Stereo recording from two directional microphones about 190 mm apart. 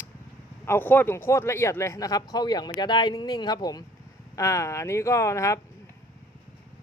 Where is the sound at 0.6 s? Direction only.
10° left (ahead or behind).